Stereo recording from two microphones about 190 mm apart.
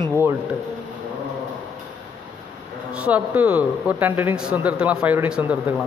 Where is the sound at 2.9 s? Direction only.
5° right (ahead or behind).